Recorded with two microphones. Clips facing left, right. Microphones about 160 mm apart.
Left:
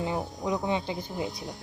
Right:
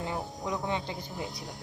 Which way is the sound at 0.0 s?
20° left (ahead or behind).